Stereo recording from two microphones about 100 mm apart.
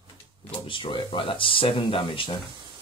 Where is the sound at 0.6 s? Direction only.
55° left (ahead or behind).